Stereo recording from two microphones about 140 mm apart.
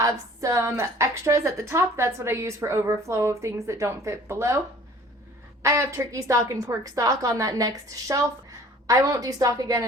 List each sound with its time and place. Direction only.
0.0 s a woman's voice: 25° right (ahead or behind)
5.6 s a woman's voice: 20° right (ahead or behind)